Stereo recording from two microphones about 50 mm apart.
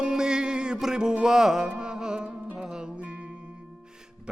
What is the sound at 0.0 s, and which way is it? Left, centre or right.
Music, centre.